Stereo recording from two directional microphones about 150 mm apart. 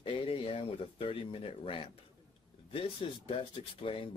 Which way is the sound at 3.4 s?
40° left (ahead or behind).